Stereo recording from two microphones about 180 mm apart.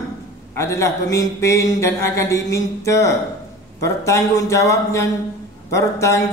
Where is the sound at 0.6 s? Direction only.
15° left (ahead or behind).